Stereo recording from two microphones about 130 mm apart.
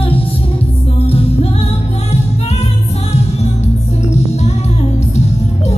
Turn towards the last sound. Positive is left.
turn(degrees=55)  # may be behind; listen again after turning